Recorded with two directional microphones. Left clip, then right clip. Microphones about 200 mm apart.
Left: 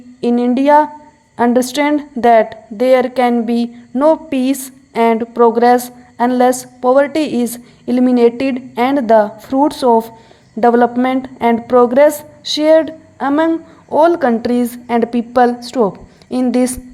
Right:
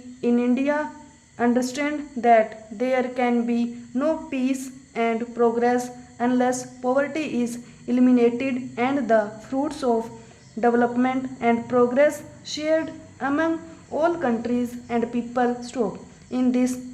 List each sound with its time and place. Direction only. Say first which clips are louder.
0.2 s a woman's voice: left 8 dB; 35° left (ahead or behind)